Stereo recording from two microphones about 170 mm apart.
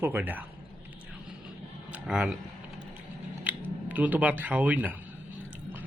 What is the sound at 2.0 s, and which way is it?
Speech, 5° right (ahead or behind).